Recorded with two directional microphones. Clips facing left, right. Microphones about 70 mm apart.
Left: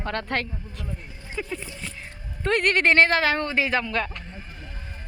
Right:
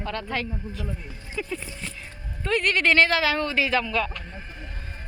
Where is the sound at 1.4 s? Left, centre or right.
Left.